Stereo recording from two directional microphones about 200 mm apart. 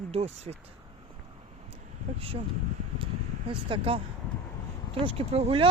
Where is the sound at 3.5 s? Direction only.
25° right (ahead or behind).